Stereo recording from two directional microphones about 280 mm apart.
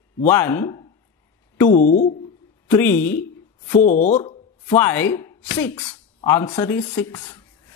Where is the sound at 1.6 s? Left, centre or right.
Left.